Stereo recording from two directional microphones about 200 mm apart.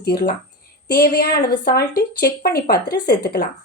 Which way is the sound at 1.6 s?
50° left (ahead or behind).